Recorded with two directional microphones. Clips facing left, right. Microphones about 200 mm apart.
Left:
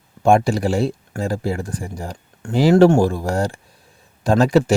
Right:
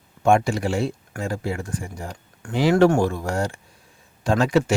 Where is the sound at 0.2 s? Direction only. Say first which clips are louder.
Left 3 dB; 35° left (ahead or behind).